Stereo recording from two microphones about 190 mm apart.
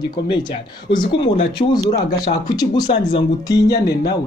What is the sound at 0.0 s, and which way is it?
A man's voice, 25° left (ahead or behind).